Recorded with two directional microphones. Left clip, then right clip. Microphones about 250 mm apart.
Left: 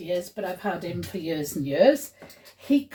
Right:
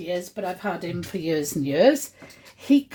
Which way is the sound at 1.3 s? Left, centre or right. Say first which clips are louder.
Right 4 dB; right.